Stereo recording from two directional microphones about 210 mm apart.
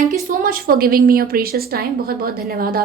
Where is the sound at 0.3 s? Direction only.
40° right (ahead or behind).